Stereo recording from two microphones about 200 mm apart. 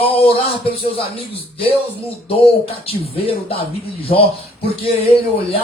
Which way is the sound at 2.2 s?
30° left (ahead or behind).